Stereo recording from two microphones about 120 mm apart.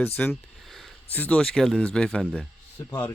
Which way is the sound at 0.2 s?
10° left (ahead or behind).